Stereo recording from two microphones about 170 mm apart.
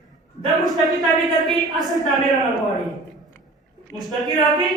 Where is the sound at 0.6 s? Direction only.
Centre (ahead or behind).